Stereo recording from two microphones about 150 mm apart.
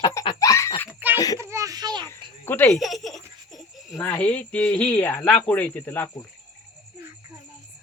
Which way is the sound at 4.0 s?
10° left (ahead or behind).